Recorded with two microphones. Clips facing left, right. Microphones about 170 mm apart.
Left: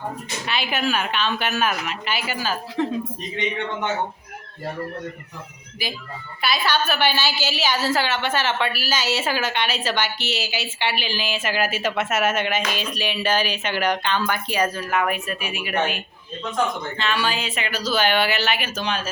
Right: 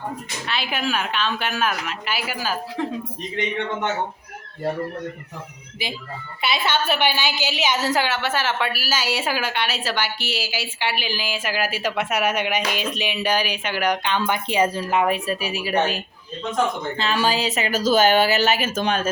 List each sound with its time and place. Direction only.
0.4 s a woman's voice: 5° left (ahead or behind)
6.4 s a woman's voice: 25° right (ahead or behind)
17.0 s speech: 35° right (ahead or behind)